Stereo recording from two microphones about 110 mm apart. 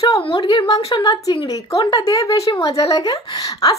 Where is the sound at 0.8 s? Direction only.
35° left (ahead or behind).